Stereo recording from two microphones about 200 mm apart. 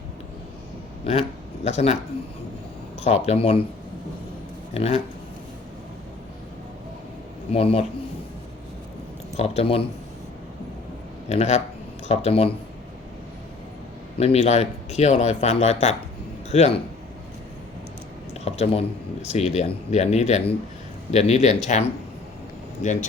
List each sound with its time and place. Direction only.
1.6 s speech: 35° left (ahead or behind)
3.0 s speech: 30° left (ahead or behind)
4.7 s speech: 30° left (ahead or behind)
7.5 s speech: 30° left (ahead or behind)
9.4 s speech: 30° left (ahead or behind)
11.3 s speech: 35° left (ahead or behind)
14.2 s a man's voice: 30° left (ahead or behind)
18.6 s speech: 30° left (ahead or behind)